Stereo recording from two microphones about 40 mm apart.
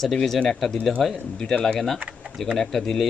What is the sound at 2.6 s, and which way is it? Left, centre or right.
Speech, centre.